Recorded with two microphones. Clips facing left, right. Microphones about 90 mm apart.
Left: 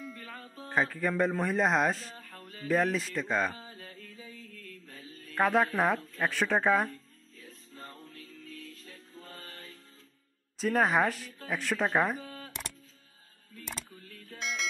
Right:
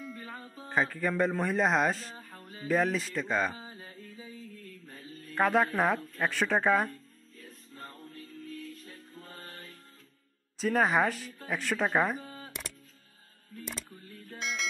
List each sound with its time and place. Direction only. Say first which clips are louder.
0.0 s music: right 1 dB; centre (ahead or behind)
0.3 s a man's voice: even; 5° right (ahead or behind)
3.5 s a sound: right 1 dB; 20° right (ahead or behind)
5.3 s speech: even; centre (ahead or behind)
7.4 s music: right 1 dB; 5° right (ahead or behind)
10.6 s speech: even; centre (ahead or behind)
14.4 s music: even; centre (ahead or behind)